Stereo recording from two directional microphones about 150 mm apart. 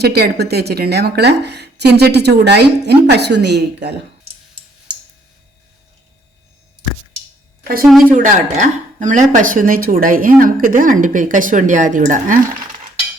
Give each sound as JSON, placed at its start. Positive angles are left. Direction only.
{"t": 0.0, "sound": "a woman's voice", "side_deg": -90}
{"t": 8.1, "sound": "a woman's voice", "side_deg": -55}